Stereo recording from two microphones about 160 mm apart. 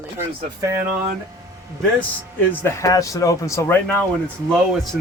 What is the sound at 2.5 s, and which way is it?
A man's voice, 15° left (ahead or behind).